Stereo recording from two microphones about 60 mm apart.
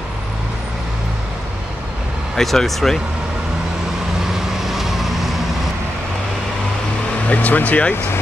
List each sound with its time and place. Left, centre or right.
2.3 s speech: centre
4.6 s vehicle: centre
7.2 s speech: left